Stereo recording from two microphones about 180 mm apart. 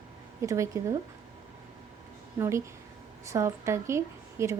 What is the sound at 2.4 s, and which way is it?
A woman's voice, 15° right (ahead or behind).